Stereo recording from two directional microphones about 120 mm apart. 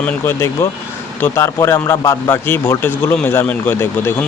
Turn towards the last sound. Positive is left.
turn(degrees=20)  # may be behind; listen again after turning